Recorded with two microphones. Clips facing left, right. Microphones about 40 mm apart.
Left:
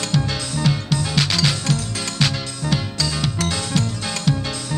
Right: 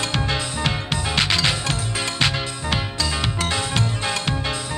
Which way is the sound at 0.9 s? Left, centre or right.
Right.